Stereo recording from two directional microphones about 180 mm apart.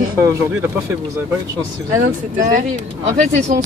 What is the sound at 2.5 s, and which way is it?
Speech, 40° right (ahead or behind).